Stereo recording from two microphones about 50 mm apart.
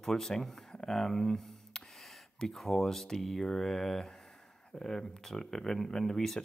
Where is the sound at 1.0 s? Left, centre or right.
Centre.